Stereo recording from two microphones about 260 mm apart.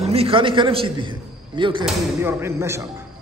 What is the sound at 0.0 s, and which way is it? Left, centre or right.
A man's voice, right.